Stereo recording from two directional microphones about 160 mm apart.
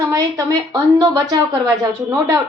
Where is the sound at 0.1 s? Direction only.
20° right (ahead or behind).